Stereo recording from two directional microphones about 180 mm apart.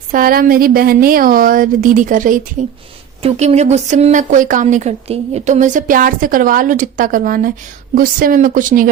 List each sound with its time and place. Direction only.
0.1 s speech: 50° right (ahead or behind)
3.2 s speech: 35° right (ahead or behind)